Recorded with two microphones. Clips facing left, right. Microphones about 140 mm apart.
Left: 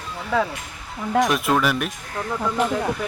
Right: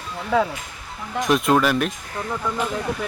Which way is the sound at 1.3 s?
Centre (ahead or behind).